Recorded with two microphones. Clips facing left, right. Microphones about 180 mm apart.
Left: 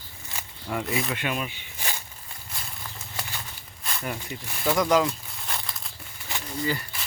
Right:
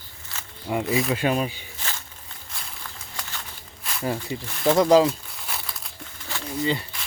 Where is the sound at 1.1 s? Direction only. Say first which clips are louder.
Right 7 dB; 35° right (ahead or behind).